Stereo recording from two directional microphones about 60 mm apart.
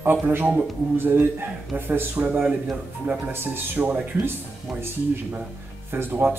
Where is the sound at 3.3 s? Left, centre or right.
Right.